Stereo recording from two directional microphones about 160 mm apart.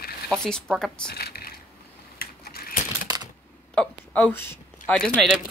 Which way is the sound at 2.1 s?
70° left (ahead or behind).